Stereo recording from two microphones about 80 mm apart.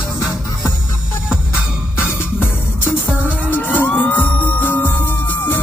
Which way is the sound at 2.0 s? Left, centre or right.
Left.